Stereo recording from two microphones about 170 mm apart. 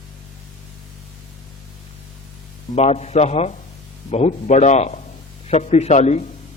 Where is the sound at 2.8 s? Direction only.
40° left (ahead or behind).